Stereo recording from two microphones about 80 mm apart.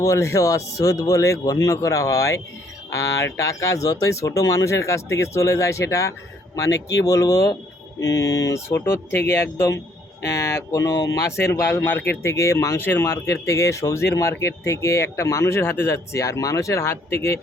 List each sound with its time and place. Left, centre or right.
0.0 s speech: left
11.3 s speech: left